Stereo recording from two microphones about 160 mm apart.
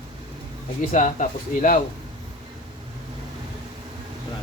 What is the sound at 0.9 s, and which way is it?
Speech, 50° left (ahead or behind).